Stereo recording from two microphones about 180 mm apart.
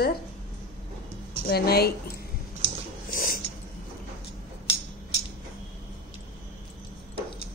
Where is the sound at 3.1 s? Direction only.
50° left (ahead or behind).